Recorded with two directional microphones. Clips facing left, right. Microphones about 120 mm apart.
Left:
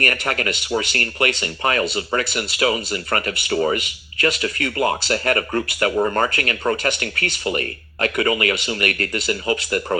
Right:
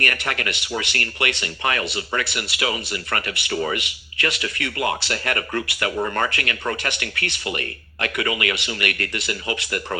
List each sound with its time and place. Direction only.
0.0 s speech: 35° left (ahead or behind)